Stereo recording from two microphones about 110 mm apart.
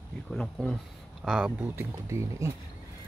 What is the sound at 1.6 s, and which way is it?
Speech, 25° right (ahead or behind).